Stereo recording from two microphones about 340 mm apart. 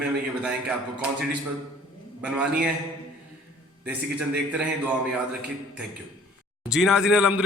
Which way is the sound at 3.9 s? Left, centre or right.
Centre.